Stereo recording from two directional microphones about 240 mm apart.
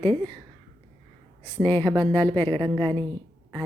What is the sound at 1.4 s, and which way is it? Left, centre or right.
Speech, centre.